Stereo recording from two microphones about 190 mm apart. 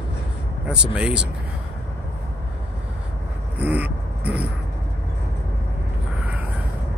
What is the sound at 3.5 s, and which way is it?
Vehicle, 10° right (ahead or behind).